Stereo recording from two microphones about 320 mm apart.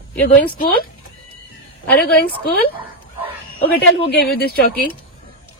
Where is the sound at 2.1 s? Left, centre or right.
Left.